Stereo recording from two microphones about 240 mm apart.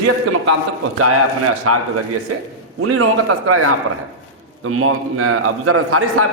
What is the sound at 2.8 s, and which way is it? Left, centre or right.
A man's voice, right.